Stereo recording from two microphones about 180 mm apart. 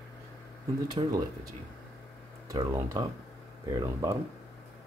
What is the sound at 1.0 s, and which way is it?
Speech, 25° right (ahead or behind).